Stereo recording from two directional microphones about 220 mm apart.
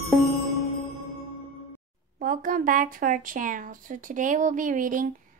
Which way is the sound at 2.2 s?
40° right (ahead or behind).